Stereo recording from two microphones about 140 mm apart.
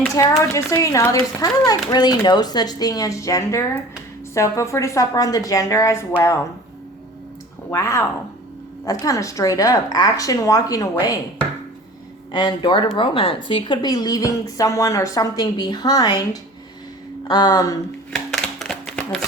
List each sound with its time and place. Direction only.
0.2 s speech: 20° left (ahead or behind)
7.7 s speech: 20° left (ahead or behind)
12.3 s speech: 35° left (ahead or behind)
17.2 s speech: 30° left (ahead or behind)
18.1 s a sound: 5° left (ahead or behind)